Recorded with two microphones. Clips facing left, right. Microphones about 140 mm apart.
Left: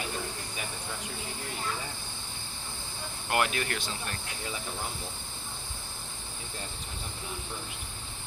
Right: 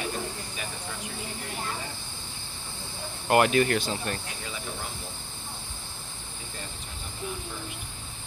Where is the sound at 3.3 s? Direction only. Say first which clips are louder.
Right 8 dB; 40° right (ahead or behind).